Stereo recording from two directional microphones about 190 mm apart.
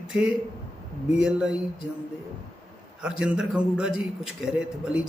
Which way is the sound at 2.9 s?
5° right (ahead or behind).